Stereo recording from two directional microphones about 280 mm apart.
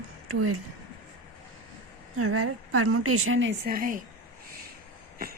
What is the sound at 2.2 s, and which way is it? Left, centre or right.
A woman's voice, right.